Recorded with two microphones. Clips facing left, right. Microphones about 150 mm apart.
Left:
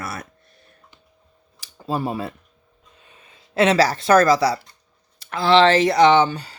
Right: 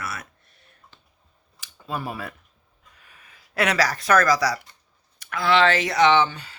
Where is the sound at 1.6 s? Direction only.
35° left (ahead or behind).